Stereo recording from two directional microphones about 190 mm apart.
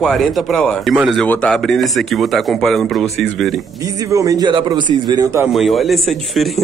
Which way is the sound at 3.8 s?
15° right (ahead or behind).